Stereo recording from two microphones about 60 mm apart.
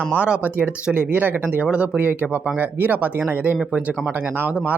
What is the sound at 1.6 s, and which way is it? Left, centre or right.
Speech, centre.